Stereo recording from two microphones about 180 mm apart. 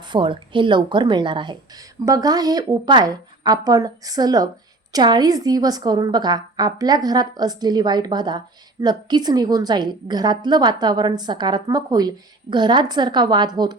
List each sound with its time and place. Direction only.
0.0 s a woman's voice: 25° right (ahead or behind)